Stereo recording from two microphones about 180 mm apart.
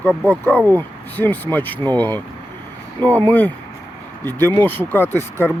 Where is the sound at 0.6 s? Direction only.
20° right (ahead or behind).